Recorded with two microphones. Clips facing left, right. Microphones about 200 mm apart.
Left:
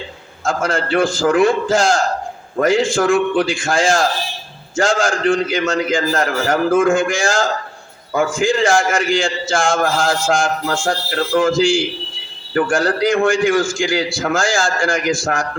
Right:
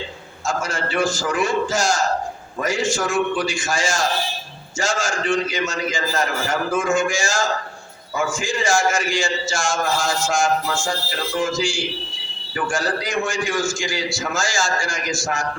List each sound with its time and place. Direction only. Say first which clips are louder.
0.4 s a man's voice: left 6 dB; 55° left (ahead or behind)
12.5 s a man's voice: left 7 dB; 60° left (ahead or behind)